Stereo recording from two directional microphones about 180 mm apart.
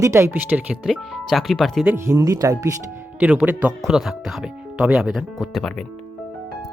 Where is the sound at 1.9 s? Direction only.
15° right (ahead or behind); by 5.8 s centre (ahead or behind).